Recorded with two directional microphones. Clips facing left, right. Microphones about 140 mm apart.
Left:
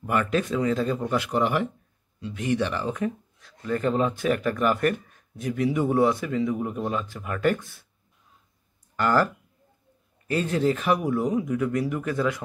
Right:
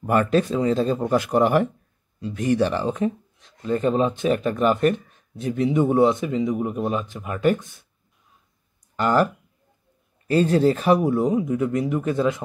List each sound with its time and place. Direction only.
0.0 s speech: 40° right (ahead or behind); by 7.8 s 20° right (ahead or behind)
8.9 s speech: 20° right (ahead or behind)
10.2 s speech: 35° right (ahead or behind)